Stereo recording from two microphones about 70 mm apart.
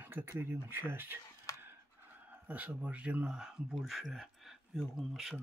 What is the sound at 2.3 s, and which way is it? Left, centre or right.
A man's voice, right.